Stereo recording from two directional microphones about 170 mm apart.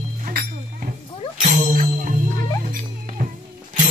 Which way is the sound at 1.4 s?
45° right (ahead or behind).